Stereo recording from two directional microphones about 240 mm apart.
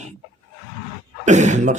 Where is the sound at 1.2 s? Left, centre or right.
Right.